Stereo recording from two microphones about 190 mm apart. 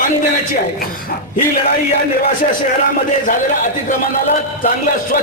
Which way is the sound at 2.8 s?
45° left (ahead or behind).